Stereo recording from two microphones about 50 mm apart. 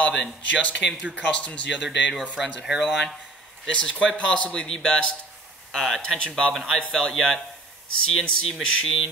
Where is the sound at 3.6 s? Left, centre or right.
Centre.